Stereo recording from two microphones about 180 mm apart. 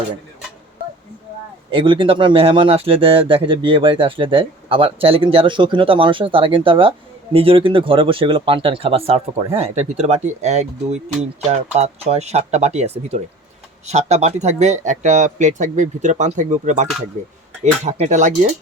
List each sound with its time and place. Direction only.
1.7 s speech: 30° right (ahead or behind)